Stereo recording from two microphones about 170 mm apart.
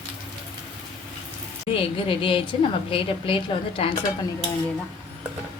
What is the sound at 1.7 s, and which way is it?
A woman's voice, 30° left (ahead or behind).